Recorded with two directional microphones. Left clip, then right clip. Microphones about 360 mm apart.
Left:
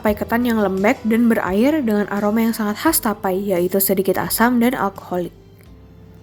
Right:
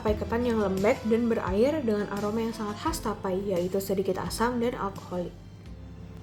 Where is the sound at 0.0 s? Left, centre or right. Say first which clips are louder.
Left 8 dB; left.